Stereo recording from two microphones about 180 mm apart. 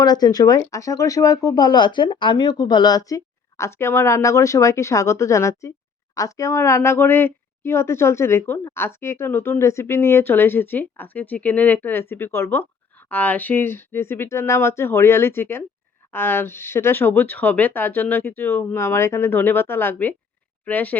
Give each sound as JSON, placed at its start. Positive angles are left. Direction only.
{"t": 0.0, "sound": "speech", "side_deg": 20}